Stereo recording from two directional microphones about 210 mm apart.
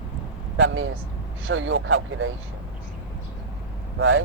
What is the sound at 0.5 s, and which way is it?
Speech, 60° right (ahead or behind).